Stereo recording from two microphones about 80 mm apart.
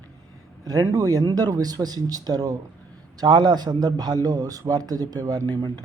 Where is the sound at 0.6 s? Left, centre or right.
Right.